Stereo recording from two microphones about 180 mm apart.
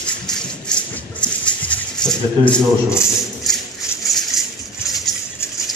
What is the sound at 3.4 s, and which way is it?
Maraca, centre (ahead or behind).